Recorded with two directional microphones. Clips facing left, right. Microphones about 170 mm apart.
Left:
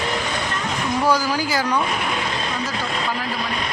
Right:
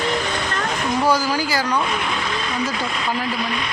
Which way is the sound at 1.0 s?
10° right (ahead or behind).